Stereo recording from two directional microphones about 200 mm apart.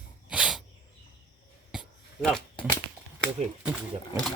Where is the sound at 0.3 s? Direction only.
5° right (ahead or behind).